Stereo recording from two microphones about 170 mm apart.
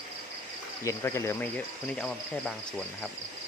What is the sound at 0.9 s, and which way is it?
Speech, 15° left (ahead or behind).